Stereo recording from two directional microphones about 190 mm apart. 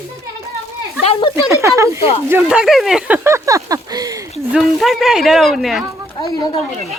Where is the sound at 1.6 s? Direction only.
15° right (ahead or behind).